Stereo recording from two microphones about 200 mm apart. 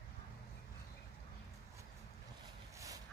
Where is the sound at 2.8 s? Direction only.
15° right (ahead or behind).